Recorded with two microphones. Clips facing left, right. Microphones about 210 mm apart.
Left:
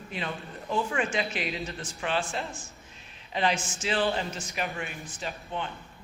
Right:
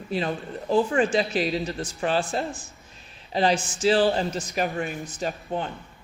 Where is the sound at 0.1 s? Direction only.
35° right (ahead or behind).